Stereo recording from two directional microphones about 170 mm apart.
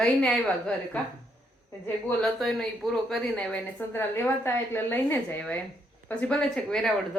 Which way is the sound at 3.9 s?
15° left (ahead or behind).